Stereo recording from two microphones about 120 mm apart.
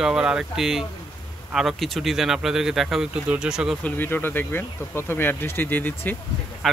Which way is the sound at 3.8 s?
15° left (ahead or behind).